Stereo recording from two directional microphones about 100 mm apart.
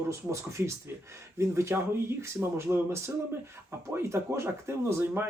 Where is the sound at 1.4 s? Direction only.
25° right (ahead or behind).